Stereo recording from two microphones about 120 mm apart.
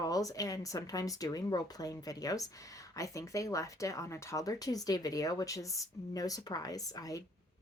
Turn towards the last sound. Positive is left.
turn(degrees=30)  # may be behind; listen again after turning